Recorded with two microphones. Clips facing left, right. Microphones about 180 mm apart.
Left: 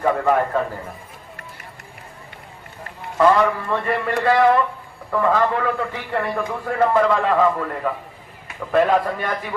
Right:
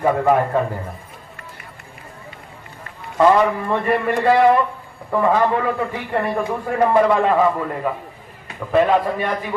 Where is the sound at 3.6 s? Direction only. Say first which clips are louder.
Right 3 dB; 20° right (ahead or behind).